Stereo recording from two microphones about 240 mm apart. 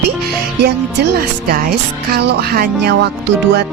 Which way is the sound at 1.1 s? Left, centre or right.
Right.